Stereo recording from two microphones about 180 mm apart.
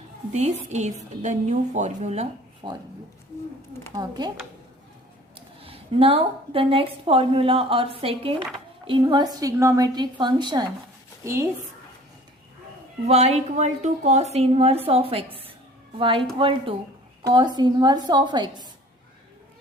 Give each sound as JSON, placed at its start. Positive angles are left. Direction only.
{"t": 0.3, "sound": "a woman's voice", "side_deg": -40}
{"t": 2.6, "sound": "a woman's voice", "side_deg": -25}
{"t": 3.9, "sound": "a woman's voice", "side_deg": -25}
{"t": 5.6, "sound": "a woman's voice", "side_deg": -30}
{"t": 13.1, "sound": "a woman's voice", "side_deg": -35}